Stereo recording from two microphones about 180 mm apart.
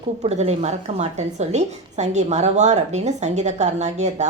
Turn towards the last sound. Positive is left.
turn(degrees=-40)  # may be behind; listen again after turning